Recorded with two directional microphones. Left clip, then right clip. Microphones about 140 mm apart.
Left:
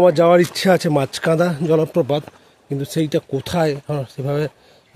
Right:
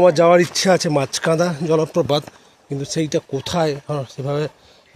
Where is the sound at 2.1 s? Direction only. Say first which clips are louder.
Right 1 dB; 20° left (ahead or behind).